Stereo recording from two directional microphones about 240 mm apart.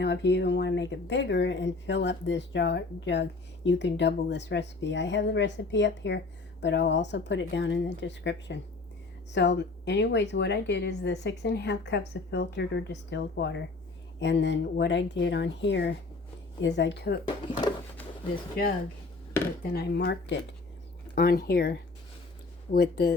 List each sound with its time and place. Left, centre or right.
0.0 s speech: left
17.2 s speech: centre
19.6 s speech: left